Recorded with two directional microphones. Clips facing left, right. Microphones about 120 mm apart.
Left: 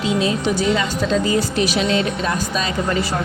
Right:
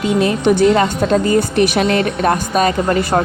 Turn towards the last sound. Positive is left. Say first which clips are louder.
# right 6 dB
turn(degrees=-55)  # may be behind; listen again after turning